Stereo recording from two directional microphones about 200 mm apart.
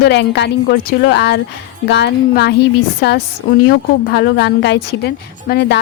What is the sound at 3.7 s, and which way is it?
A woman's voice, 55° left (ahead or behind).